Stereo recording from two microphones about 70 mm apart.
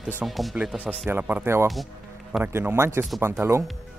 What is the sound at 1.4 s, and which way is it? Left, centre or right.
Speech, right.